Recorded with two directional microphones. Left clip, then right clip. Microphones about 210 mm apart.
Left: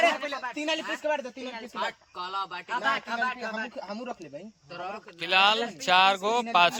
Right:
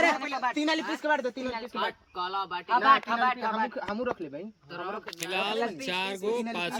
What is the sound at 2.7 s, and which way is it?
Speech, 20° right (ahead or behind).